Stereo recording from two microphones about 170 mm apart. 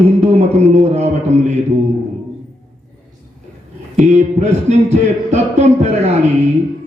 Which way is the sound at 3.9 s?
40° right (ahead or behind).